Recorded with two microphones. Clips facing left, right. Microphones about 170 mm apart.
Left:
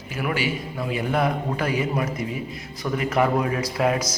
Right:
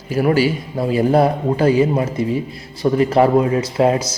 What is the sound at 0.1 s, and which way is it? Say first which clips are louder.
A man's voice: right 10 dB; 35° right (ahead or behind).